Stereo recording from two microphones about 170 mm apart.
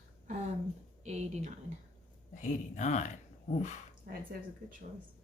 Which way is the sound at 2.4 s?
45° left (ahead or behind).